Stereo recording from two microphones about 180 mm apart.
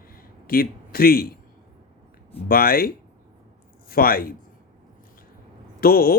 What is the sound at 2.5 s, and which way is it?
Speech, 55° left (ahead or behind).